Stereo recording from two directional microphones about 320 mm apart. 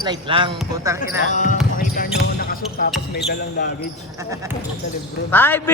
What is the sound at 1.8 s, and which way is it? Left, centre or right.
Basketball bounce, left.